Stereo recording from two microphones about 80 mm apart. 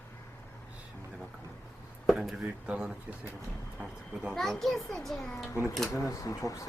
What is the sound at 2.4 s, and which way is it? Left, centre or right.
Speech, centre.